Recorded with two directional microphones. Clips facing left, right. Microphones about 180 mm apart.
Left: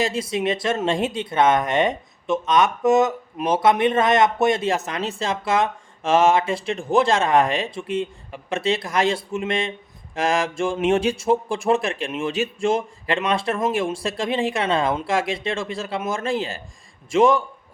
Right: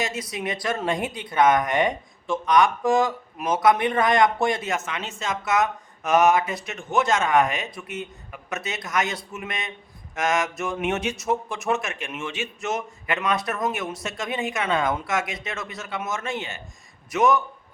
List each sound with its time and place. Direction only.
0.0 s speech: 30° left (ahead or behind)